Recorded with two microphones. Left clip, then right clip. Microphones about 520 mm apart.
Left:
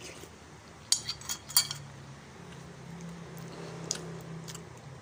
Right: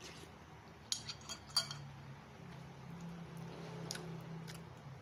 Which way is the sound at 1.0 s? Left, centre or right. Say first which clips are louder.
Left 10 dB; right.